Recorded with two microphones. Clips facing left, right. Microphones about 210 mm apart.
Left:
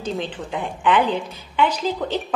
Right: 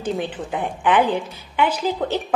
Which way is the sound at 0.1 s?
10° right (ahead or behind).